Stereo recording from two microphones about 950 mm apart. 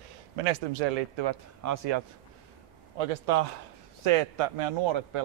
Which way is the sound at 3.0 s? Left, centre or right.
Right.